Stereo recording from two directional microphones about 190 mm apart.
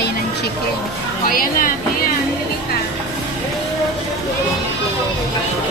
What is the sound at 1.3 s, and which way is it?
Speech, 50° left (ahead or behind).